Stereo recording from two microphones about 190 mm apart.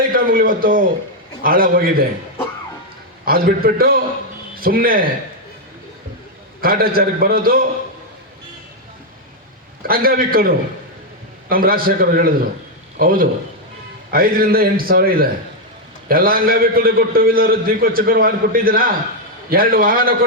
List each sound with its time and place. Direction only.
0.1 s a man's voice: 50° right (ahead or behind)
3.2 s a man's voice: 50° right (ahead or behind)
6.6 s a man's voice: 50° right (ahead or behind)
9.8 s a man's voice: 50° right (ahead or behind)